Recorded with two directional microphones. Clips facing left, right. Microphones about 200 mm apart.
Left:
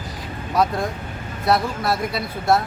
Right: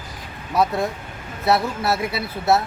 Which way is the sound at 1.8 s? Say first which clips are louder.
Even; 5° right (ahead or behind).